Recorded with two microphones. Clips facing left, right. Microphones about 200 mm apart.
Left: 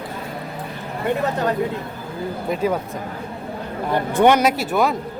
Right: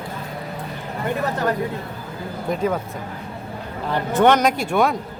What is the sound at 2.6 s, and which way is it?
Speech, 10° left (ahead or behind).